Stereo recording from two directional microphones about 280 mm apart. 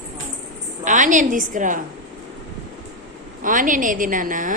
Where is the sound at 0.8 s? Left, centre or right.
Right.